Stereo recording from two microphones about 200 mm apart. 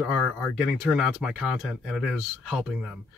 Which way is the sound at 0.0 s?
Centre (ahead or behind).